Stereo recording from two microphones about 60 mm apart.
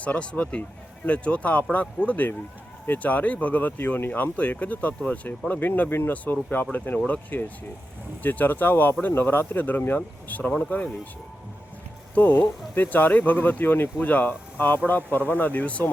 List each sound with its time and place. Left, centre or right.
0.0 s speech: left
12.1 s speech: left